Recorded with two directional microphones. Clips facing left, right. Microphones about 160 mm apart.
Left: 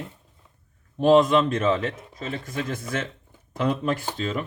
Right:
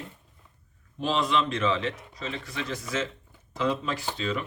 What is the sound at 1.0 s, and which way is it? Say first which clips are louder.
Speech: left 9 dB; 50° left (ahead or behind).